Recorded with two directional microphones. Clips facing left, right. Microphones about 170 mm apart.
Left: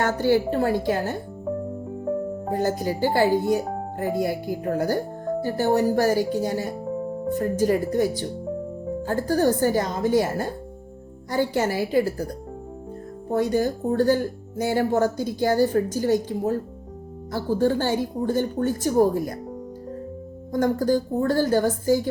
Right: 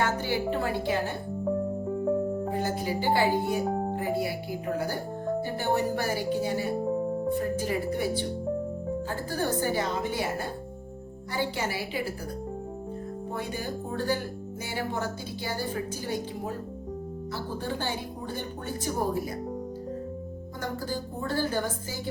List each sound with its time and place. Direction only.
0.3 s speech: 40° left (ahead or behind)
2.5 s a woman's voice: 45° left (ahead or behind)
13.3 s a woman's voice: 40° left (ahead or behind)
20.5 s a woman's voice: 45° left (ahead or behind)